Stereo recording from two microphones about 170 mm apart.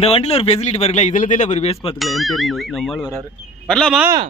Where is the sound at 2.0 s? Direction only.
Centre (ahead or behind).